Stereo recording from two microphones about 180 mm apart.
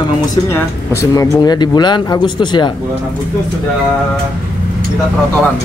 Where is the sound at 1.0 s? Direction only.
20° left (ahead or behind).